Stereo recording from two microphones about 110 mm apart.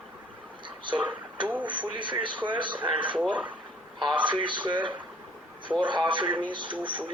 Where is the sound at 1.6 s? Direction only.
50° right (ahead or behind).